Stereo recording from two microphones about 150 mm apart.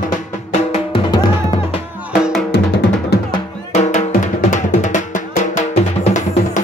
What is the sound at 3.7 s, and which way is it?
Drum, 50° left (ahead or behind).